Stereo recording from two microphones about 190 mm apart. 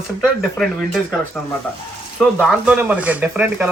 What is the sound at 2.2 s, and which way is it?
Speech, 5° right (ahead or behind).